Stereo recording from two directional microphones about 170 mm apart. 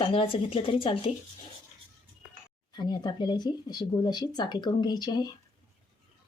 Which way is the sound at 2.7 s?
25° left (ahead or behind).